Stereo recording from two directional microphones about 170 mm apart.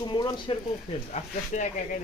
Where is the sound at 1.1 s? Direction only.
45° left (ahead or behind).